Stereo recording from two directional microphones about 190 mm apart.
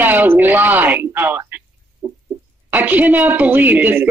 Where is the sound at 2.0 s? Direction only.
15° right (ahead or behind).